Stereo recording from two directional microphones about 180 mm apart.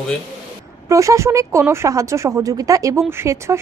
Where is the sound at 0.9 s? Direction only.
15° right (ahead or behind).